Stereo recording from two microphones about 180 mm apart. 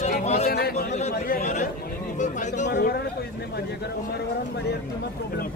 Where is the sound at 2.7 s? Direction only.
60° left (ahead or behind).